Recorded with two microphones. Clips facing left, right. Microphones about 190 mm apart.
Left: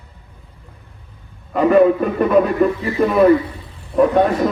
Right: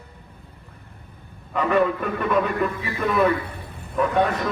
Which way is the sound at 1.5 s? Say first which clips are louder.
Left 8 dB; 40° left (ahead or behind).